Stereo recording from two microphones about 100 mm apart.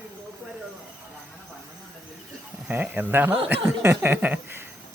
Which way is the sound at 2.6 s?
15° right (ahead or behind).